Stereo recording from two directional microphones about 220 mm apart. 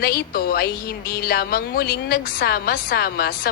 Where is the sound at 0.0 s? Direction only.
45° left (ahead or behind).